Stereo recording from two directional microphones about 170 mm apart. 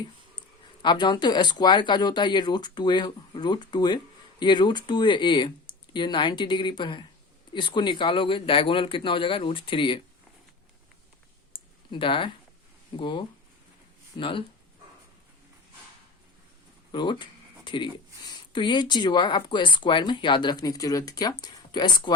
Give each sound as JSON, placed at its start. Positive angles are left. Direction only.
{"t": 0.8, "sound": "speech", "side_deg": 25}
{"t": 11.9, "sound": "speech", "side_deg": 30}
{"t": 16.9, "sound": "speech", "side_deg": 25}